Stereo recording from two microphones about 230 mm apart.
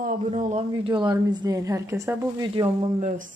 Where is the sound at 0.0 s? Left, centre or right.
Right; by 2.6 s centre.